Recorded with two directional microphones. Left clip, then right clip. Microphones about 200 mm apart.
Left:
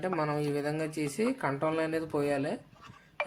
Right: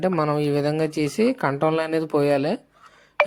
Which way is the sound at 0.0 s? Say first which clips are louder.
Right 9 dB; 40° right (ahead or behind).